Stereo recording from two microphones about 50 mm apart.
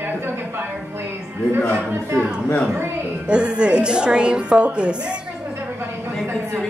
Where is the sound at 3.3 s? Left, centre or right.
Centre.